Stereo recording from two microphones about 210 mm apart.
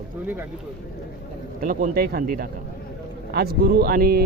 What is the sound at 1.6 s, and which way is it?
Speech, 40° right (ahead or behind).